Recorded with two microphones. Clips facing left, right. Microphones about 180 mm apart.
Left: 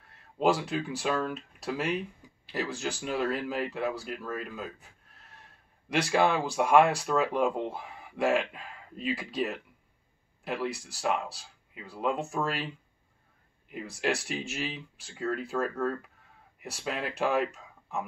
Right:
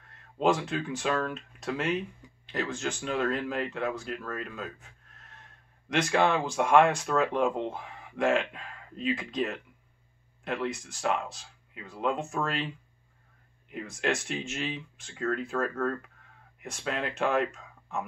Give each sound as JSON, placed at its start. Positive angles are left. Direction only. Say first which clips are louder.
{"t": 0.4, "sound": "speech", "louder": "even", "side_deg": 5}
{"t": 13.7, "sound": "speech", "louder": "even", "side_deg": 5}